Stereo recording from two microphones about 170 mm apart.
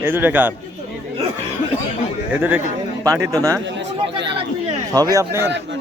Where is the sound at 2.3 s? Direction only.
10° right (ahead or behind).